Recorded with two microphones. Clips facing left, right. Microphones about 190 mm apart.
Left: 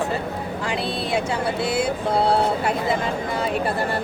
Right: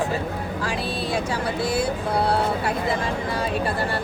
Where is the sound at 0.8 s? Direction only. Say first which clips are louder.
Left 3 dB; 25° left (ahead or behind).